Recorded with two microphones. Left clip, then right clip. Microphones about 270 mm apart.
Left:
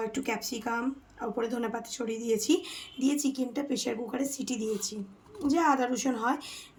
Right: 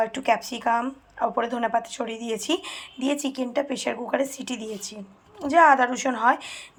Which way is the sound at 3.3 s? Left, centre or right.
Centre.